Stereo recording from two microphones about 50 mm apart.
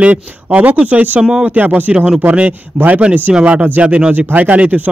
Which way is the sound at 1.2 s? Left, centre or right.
Centre.